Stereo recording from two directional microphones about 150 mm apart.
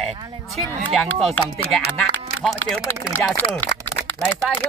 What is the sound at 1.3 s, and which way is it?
Speech, 10° left (ahead or behind).